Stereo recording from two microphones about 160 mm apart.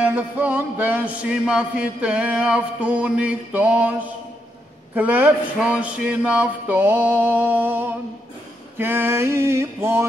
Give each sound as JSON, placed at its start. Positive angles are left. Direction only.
{"t": 0.0, "sound": "music", "side_deg": -10}
{"t": 4.9, "sound": "music", "side_deg": -10}